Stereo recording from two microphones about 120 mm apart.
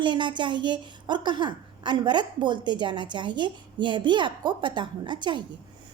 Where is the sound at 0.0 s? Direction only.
40° right (ahead or behind).